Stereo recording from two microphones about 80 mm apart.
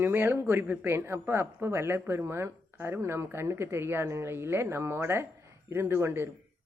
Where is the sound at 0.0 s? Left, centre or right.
Right.